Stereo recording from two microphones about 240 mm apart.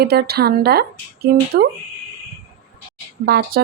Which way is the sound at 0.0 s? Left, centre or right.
Right.